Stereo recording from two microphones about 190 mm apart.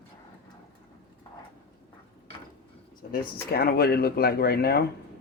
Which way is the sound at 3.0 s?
50° left (ahead or behind).